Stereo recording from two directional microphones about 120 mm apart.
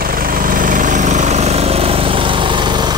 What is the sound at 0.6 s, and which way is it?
Vehicle, 90° right.